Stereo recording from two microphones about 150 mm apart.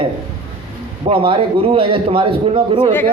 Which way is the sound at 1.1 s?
40° right (ahead or behind).